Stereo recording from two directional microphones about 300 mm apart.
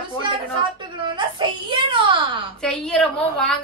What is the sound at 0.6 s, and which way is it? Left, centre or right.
Speech, centre.